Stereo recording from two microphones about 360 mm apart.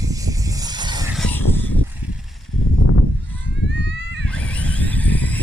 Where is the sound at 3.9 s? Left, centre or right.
Right.